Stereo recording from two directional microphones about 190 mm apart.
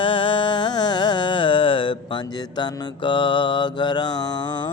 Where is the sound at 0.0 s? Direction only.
25° left (ahead or behind).